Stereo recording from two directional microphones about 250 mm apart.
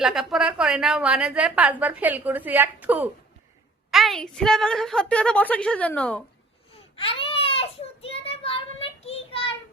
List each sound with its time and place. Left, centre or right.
0.0 s a woman's voice: centre
6.7 s baby cry: left